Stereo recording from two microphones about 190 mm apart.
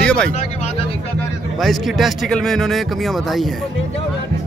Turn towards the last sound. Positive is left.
turn(degrees=0)  # may be behind; listen again after turning